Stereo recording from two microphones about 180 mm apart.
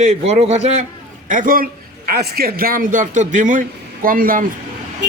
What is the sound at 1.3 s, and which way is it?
Speech, 50° right (ahead or behind).